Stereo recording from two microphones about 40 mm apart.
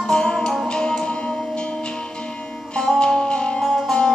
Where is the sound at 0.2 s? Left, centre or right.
Left.